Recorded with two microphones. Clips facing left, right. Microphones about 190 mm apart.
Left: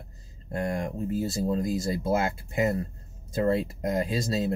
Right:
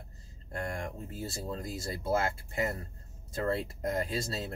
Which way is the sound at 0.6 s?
20° left (ahead or behind).